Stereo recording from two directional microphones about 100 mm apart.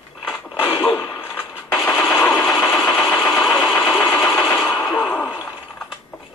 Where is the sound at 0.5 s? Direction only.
20° left (ahead or behind).